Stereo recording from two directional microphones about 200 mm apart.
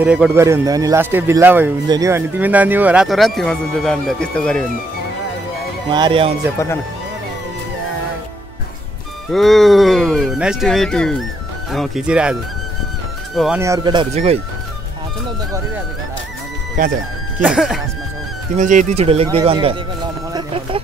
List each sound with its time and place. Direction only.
0.0 s speech: 5° right (ahead or behind)
5.9 s speech: 25° right (ahead or behind)
9.3 s speech: centre (ahead or behind)
13.6 s speech: 20° right (ahead or behind)
17.4 s speech: 5° right (ahead or behind)
18.6 s speech: 40° right (ahead or behind)
20.3 s a sound: 25° right (ahead or behind)